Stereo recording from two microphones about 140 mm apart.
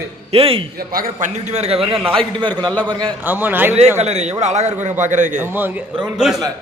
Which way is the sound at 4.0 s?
50° right (ahead or behind).